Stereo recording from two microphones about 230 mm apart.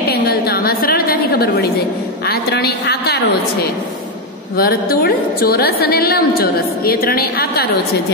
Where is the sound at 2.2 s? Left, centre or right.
Left.